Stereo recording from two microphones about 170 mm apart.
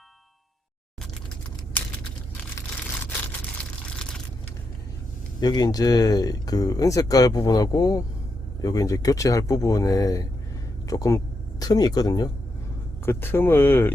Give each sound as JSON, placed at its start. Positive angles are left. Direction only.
{"t": 5.4, "sound": "speech", "side_deg": 25}